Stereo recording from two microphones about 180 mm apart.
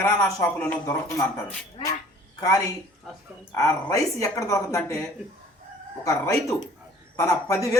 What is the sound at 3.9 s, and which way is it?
Speech, 15° left (ahead or behind).